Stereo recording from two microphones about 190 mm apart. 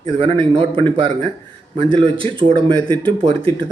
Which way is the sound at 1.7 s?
30° right (ahead or behind).